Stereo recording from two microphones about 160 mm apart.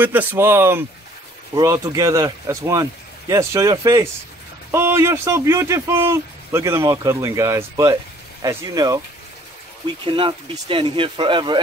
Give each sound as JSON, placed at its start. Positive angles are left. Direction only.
{"t": 0.0, "sound": "speech", "side_deg": -10}
{"t": 10.0, "sound": "speech", "side_deg": -30}